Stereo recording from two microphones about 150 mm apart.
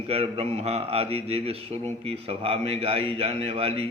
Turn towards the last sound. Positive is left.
turn(degrees=-40)  # may be behind; listen again after turning